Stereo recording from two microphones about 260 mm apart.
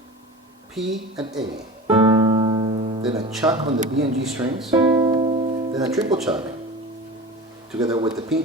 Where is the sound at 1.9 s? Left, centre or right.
Centre.